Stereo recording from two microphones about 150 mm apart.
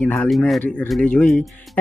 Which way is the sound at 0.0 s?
10° left (ahead or behind).